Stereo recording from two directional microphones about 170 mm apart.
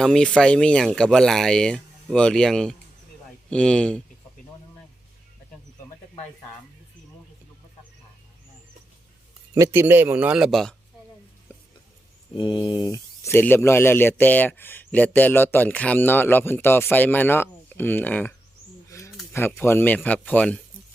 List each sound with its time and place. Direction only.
0.0 s speech: 5° left (ahead or behind)
9.6 s a man's voice: 15° right (ahead or behind); by 10.8 s centre (ahead or behind)
11.5 s stir: 15° left (ahead or behind)
12.3 s speech: 30° left (ahead or behind); by 18.3 s 10° left (ahead or behind)
18.9 s a sound: 15° left (ahead or behind)
19.3 s speech: 15° left (ahead or behind)